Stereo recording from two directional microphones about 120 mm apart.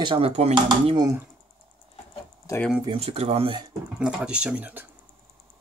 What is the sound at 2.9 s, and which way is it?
Speech, 60° right (ahead or behind).